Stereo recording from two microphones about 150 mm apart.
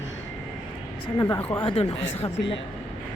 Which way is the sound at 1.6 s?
40° left (ahead or behind).